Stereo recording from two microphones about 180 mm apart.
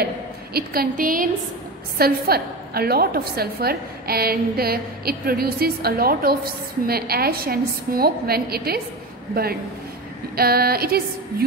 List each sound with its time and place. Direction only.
0.0 s a woman's voice: 60° right (ahead or behind)